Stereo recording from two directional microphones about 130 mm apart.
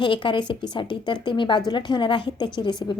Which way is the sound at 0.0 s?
40° left (ahead or behind).